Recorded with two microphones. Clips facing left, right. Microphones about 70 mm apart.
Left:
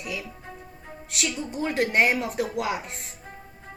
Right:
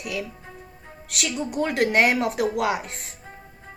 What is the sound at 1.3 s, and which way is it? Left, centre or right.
A woman's voice, right.